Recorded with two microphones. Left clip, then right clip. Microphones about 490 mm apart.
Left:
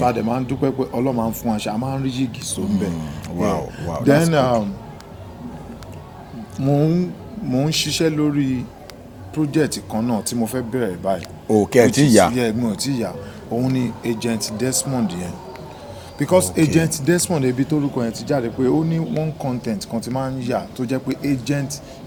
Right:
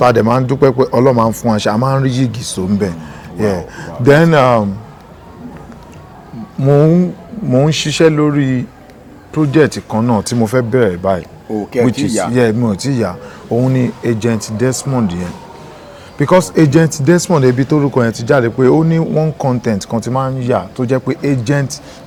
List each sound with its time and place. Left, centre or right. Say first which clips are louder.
0.0 s speech: right 9 dB; right
6.6 s speech: right 9 dB; right
11.5 s speech: left 1 dB; left
12.3 s speech: right 8 dB; right